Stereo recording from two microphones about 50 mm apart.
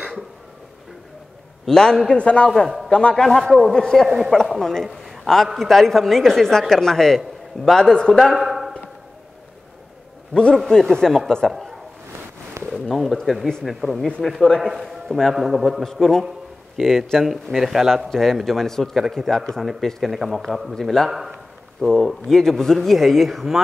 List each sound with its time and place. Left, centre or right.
1.7 s speech: centre
2.1 s a man's voice: left
3.3 s a man's voice: centre
3.7 s a man's voice: centre
8.4 s a sound: centre
10.3 s speech: centre
12.6 s a man's voice: centre
15.8 s a man's voice: centre
20.1 s a man's voice: centre
20.7 s speech: centre
21.1 s a man's voice: centre
22.0 s a man's voice: centre